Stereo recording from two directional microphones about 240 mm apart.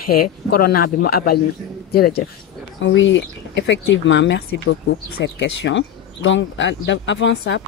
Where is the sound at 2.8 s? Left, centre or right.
Left.